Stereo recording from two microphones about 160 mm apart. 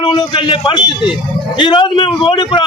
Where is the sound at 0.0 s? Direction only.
30° left (ahead or behind).